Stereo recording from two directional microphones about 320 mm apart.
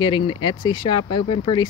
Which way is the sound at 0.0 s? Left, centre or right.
Centre.